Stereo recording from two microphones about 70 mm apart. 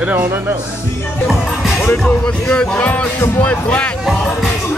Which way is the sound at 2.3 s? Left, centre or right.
Centre.